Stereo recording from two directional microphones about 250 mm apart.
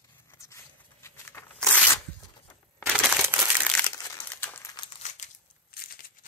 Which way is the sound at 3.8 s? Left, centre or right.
Centre.